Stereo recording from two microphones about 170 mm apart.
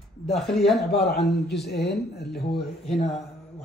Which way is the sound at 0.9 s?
70° left (ahead or behind).